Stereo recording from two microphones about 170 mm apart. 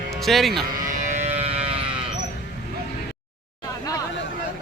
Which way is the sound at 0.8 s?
45° right (ahead or behind).